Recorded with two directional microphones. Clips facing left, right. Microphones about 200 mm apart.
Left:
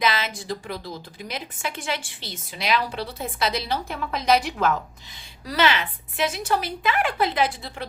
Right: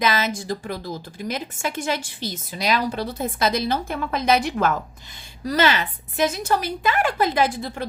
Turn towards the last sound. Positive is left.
turn(degrees=-45)  # may be behind; listen again after turning